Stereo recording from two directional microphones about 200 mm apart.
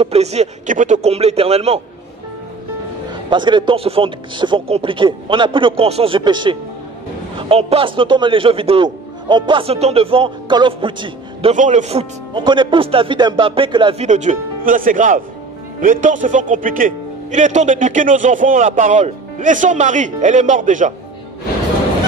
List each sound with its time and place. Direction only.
0.0 s speech: 30° right (ahead or behind)
3.3 s a man's voice: 25° right (ahead or behind)
11.5 s speech: 40° right (ahead or behind)